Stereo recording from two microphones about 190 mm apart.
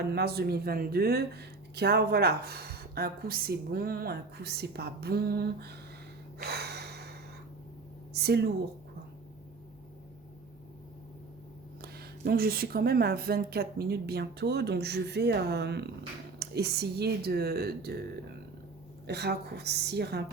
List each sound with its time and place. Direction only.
0.1 s speech: 60° right (ahead or behind)
6.4 s gasp: 60° right (ahead or behind)
8.1 s speech: 60° right (ahead or behind)
11.8 s speech: 55° right (ahead or behind)
19.0 s speech: 60° right (ahead or behind)